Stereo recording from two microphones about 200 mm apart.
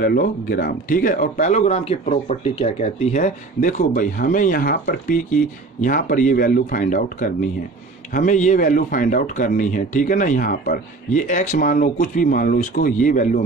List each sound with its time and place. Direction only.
0.0 s speech: 45° left (ahead or behind)